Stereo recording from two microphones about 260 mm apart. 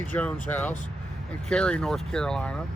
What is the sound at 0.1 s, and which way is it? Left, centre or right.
Speech, centre.